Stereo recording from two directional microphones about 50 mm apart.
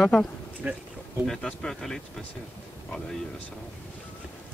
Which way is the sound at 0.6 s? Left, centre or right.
Right.